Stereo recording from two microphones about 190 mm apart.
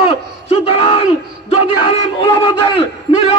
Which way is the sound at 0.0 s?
30° left (ahead or behind).